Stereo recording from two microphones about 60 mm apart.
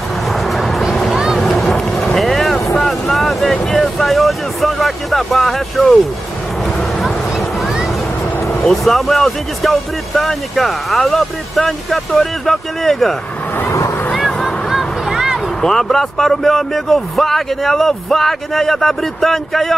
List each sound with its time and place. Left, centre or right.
0.3 s music: centre
1.1 s vehicle: centre
7.0 s music: centre
8.6 s speech: centre
13.7 s vehicle: left
14.1 s a sound: centre
15.6 s speech: centre